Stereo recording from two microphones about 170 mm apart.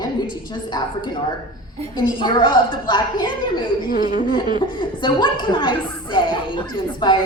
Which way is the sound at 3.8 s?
55° left (ahead or behind).